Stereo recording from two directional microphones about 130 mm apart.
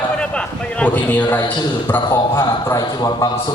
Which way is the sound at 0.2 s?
10° left (ahead or behind).